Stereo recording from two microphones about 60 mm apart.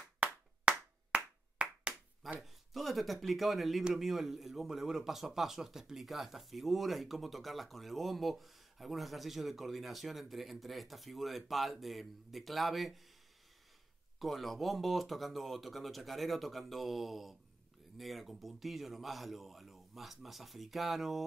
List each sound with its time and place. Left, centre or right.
0.2 s clapping: centre
2.4 s speech: centre
14.2 s speech: centre